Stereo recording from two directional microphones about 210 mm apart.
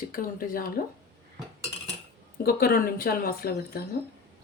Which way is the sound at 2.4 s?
45° left (ahead or behind).